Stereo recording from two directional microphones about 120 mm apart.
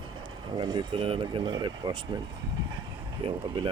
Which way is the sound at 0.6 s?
35° right (ahead or behind).